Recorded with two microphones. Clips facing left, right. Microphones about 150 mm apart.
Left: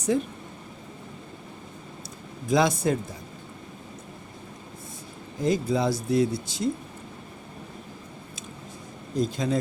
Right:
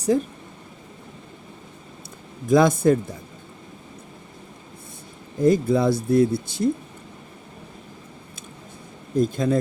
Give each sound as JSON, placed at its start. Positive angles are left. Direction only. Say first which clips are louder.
{"t": 0.1, "sound": "speech", "louder": "right 3 dB", "side_deg": -35}
{"t": 2.5, "sound": "speech", "louder": "right 6 dB", "side_deg": -50}
{"t": 5.4, "sound": "speech", "louder": "right 6 dB", "side_deg": -55}
{"t": 9.1, "sound": "speech", "louder": "right 5 dB", "side_deg": -50}